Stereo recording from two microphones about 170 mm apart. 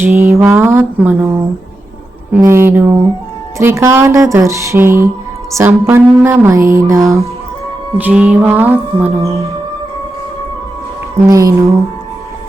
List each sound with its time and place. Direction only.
0.0 s speech: 15° right (ahead or behind)
2.5 s speech: 15° right (ahead or behind)
11.3 s speech: 20° right (ahead or behind)